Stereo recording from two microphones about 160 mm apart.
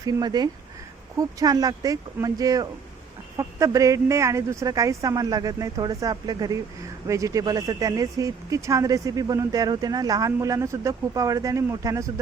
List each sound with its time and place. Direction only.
0.0 s speech: 25° right (ahead or behind)